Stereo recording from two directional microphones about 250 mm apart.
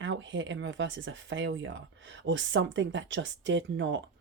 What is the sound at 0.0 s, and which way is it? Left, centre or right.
Speech, right.